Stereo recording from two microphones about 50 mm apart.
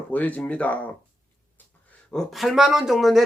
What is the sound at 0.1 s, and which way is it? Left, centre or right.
Speech, left.